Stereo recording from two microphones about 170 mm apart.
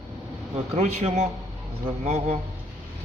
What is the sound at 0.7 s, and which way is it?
Speech, 45° right (ahead or behind).